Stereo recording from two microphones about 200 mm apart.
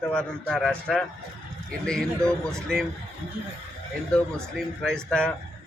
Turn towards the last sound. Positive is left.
turn(degrees=5)  # may be behind; listen again after turning